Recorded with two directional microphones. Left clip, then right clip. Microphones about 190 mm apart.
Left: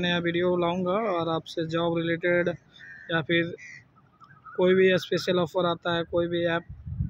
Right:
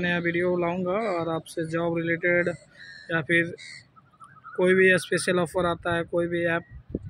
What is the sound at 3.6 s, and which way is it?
Speech, 30° left (ahead or behind).